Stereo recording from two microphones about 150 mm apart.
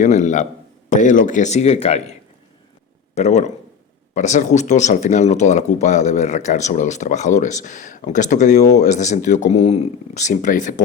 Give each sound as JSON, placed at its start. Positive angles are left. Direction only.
{"t": 0.0, "sound": "speech", "side_deg": 50}
{"t": 3.2, "sound": "speech", "side_deg": 50}